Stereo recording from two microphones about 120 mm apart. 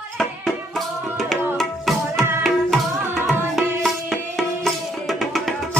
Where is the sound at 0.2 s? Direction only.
Centre (ahead or behind).